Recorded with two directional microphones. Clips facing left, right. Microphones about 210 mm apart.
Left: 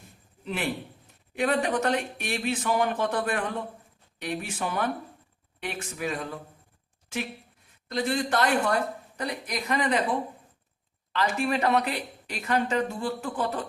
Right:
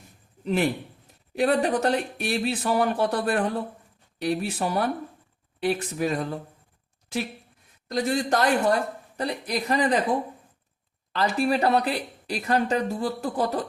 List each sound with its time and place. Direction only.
0.4 s speech: 40° right (ahead or behind)
7.9 s speech: 40° right (ahead or behind)
11.1 s speech: 35° right (ahead or behind)